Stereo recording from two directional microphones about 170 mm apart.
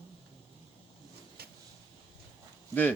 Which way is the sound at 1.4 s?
65° right (ahead or behind).